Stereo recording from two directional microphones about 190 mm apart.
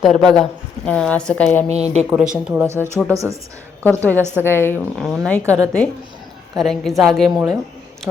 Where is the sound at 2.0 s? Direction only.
5° right (ahead or behind).